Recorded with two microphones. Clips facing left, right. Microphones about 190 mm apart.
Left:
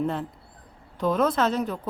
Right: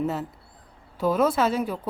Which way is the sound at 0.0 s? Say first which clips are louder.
Even; 5° right (ahead or behind).